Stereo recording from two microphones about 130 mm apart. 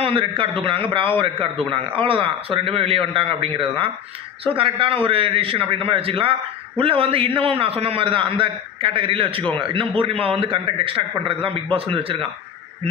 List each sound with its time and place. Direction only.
0.0 s a man's voice: 45° right (ahead or behind)